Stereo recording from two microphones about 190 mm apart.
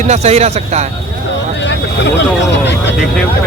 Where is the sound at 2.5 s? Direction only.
65° left (ahead or behind).